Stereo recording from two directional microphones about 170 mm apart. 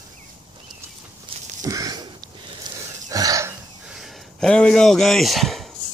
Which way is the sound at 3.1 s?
20° right (ahead or behind).